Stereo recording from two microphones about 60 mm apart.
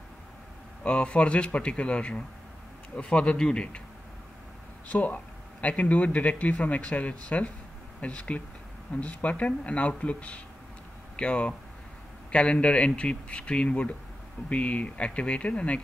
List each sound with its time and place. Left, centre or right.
0.8 s speech: centre
4.8 s speech: left